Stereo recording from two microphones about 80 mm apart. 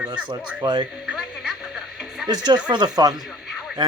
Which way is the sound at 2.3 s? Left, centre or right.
Right.